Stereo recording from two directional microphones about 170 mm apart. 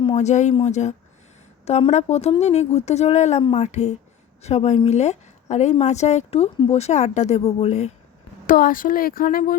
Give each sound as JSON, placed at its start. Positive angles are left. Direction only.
{"t": 0.2, "sound": "a woman's voice", "side_deg": 45}
{"t": 8.4, "sound": "speech", "side_deg": 55}